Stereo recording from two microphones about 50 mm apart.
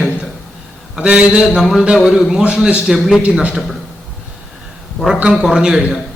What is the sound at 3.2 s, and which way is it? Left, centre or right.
Speech, right.